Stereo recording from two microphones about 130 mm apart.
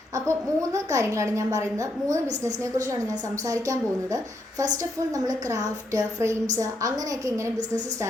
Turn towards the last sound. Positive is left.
turn(degrees=-25)  # may be behind; listen again after turning